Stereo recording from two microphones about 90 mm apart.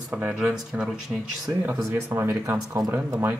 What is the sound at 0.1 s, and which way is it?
Speech, 15° right (ahead or behind).